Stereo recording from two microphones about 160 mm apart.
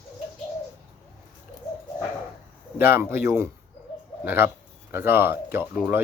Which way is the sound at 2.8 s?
15° right (ahead or behind).